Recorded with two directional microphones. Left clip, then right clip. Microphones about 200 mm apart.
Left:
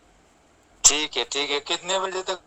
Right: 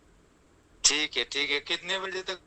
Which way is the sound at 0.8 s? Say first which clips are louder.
Left 4 dB; 5° right (ahead or behind).